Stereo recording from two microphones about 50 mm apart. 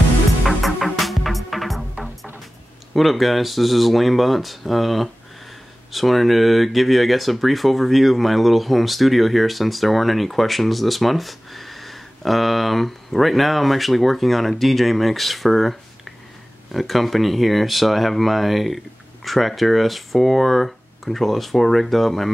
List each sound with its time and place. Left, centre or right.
0.5 s music: centre
2.9 s speech: centre